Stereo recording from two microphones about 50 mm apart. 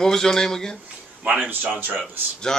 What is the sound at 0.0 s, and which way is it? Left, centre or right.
Speech, centre.